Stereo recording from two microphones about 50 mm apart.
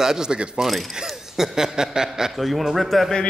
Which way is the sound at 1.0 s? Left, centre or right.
Centre.